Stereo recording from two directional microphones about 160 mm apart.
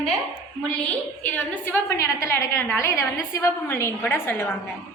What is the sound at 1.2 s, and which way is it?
A woman's voice, 10° left (ahead or behind).